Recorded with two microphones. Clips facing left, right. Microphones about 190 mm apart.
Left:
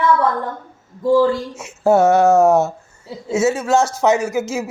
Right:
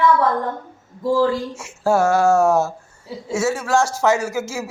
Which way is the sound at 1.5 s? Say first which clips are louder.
Left 4 dB; 20° left (ahead or behind).